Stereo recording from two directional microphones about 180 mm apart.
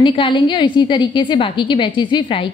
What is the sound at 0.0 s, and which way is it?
A woman's voice, 30° left (ahead or behind).